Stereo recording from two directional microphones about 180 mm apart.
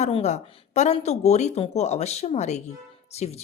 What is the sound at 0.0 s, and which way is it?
A woman's voice, 40° left (ahead or behind).